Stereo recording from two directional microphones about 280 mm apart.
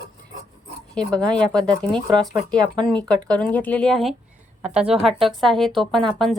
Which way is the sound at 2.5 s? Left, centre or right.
Centre.